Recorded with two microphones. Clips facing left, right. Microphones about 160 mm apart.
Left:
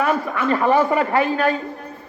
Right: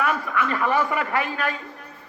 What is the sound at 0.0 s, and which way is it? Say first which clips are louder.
A man's voice: left 4 dB; 30° left (ahead or behind).